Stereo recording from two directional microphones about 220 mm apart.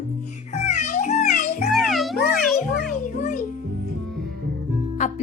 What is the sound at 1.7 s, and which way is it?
Music, centre (ahead or behind).